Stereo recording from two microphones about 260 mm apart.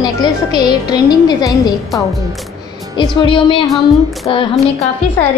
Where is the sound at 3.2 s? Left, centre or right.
Centre.